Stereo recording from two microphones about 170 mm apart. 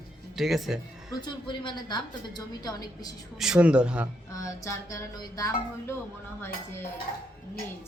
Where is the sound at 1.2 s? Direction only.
25° left (ahead or behind).